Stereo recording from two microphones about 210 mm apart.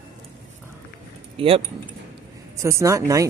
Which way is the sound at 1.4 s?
25° right (ahead or behind).